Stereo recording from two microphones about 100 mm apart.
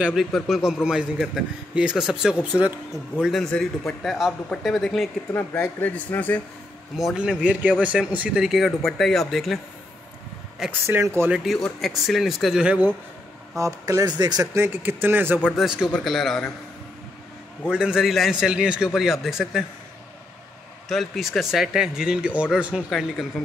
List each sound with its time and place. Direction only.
0.0 s a man's voice: centre (ahead or behind)
3.2 s speech: centre (ahead or behind)
5.3 s speech: 15° left (ahead or behind)
7.0 s a man's voice: 5° right (ahead or behind)
8.5 s speech: centre (ahead or behind)
10.7 s speech: 20° right (ahead or behind)
11.2 s speech: 5° right (ahead or behind)
13.6 s speech: 30° right (ahead or behind)
14.5 s speech: 20° right (ahead or behind)
15.5 s a man's voice: 5° right (ahead or behind)
17.6 s a man's voice: 10° right (ahead or behind)
20.9 s speech: centre (ahead or behind)
22.8 s speech: 5° left (ahead or behind)